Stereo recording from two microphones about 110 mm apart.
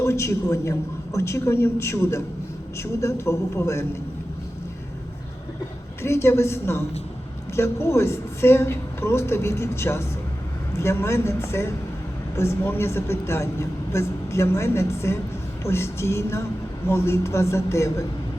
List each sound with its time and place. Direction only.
0.0 s speech: 25° left (ahead or behind)
6.0 s speech: 25° left (ahead or behind)